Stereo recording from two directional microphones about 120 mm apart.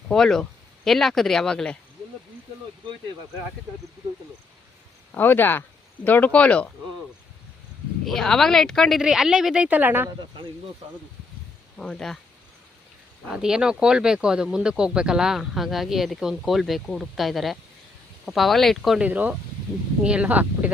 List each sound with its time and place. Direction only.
0.1 s speech: 5° left (ahead or behind)
5.1 s speech: 15° left (ahead or behind)
8.0 s speech: 5° left (ahead or behind); by 10.1 s 15° right (ahead or behind)
11.8 s speech: 5° left (ahead or behind)
13.3 s speech: 5° right (ahead or behind)
19.0 s speech: 10° right (ahead or behind)